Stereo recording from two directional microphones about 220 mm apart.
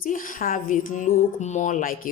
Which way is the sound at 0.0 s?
40° left (ahead or behind).